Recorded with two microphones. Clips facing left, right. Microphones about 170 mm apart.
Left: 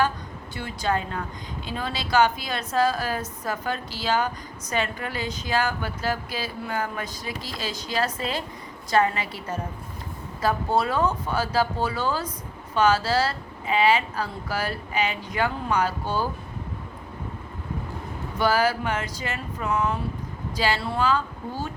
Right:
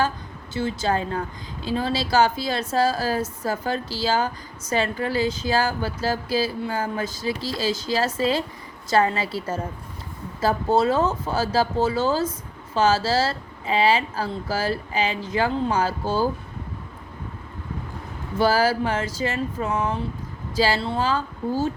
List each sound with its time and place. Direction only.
0.5 s speech: 25° right (ahead or behind)
18.3 s speech: 30° right (ahead or behind)